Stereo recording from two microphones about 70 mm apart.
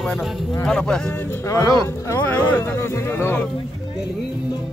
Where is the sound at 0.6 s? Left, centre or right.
Centre.